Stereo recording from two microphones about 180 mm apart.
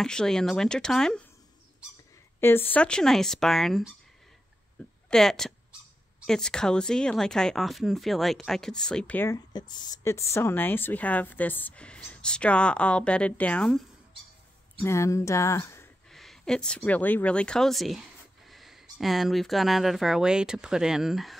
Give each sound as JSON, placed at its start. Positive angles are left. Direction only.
{"t": 0.0, "sound": "speech", "side_deg": 5}
{"t": 2.4, "sound": "speech", "side_deg": 10}
{"t": 4.8, "sound": "a sound", "side_deg": 5}
{"t": 5.1, "sound": "speech", "side_deg": 0}
{"t": 9.5, "sound": "speech", "side_deg": 25}
{"t": 14.8, "sound": "speech", "side_deg": 15}
{"t": 16.1, "sound": "speech", "side_deg": 0}